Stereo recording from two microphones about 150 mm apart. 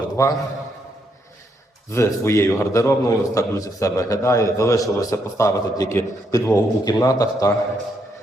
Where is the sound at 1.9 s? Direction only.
20° left (ahead or behind).